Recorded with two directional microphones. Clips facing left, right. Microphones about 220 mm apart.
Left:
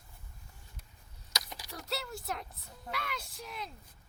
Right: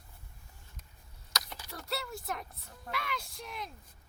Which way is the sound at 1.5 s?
Centre (ahead or behind).